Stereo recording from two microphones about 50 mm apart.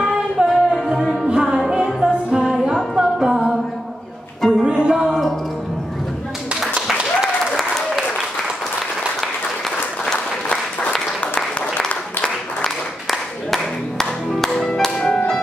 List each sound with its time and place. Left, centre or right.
0.0 s music: centre
4.4 s music: centre
4.6 s music: centre
7.0 s applause: centre
13.1 s music: centre